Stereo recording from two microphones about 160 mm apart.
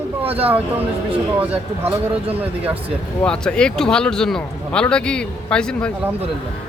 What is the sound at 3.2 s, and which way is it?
Speech, 5° left (ahead or behind).